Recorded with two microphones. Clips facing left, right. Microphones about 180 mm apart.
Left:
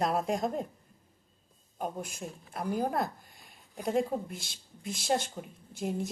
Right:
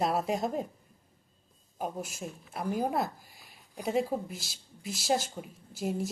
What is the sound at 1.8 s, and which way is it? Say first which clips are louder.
Speech: even; 5° right (ahead or behind).